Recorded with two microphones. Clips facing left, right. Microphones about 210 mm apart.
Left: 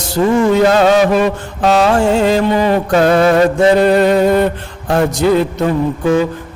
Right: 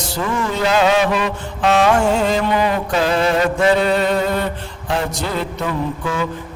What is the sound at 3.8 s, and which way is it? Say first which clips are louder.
Music: left 7 dB; 55° left (ahead or behind).